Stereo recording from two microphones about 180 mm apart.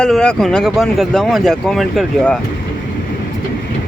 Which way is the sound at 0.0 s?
5° left (ahead or behind).